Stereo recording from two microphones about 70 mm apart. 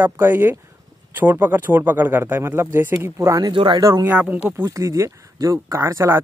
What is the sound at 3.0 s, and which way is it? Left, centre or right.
Speech, right.